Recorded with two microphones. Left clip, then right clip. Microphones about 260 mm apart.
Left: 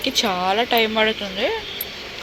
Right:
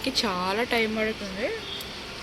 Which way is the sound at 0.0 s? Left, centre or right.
Centre.